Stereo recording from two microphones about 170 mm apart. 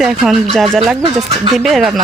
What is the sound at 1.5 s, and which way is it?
Speech, centre (ahead or behind).